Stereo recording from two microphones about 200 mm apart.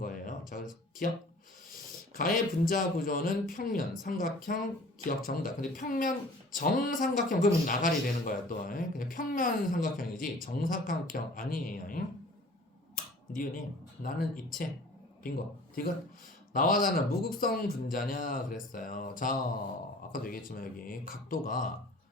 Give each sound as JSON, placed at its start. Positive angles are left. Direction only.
{"t": 0.0, "sound": "a sound", "side_deg": 45}
{"t": 1.7, "sound": "speech", "side_deg": 45}
{"t": 13.3, "sound": "speech", "side_deg": 45}
{"t": 16.5, "sound": "speech", "side_deg": 45}